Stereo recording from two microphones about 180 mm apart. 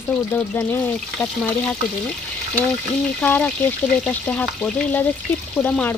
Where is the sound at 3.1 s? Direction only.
10° left (ahead or behind).